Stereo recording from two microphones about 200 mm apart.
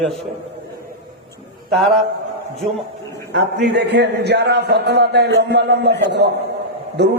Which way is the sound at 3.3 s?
55° right (ahead or behind).